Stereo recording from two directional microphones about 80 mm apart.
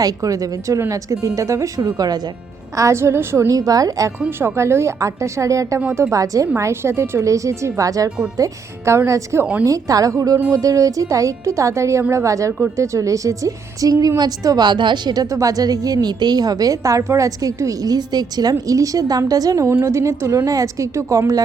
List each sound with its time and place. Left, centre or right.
0.0 s a woman's voice: right
2.7 s a woman's voice: right
3.5 s a woman's voice: right
4.4 s a woman's voice: right